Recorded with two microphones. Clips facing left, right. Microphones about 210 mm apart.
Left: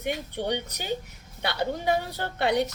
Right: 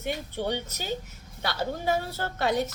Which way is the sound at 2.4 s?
65° left (ahead or behind).